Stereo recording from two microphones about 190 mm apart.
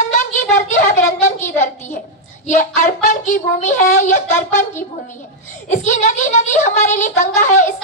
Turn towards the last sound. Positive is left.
turn(degrees=40)  # may be behind; listen again after turning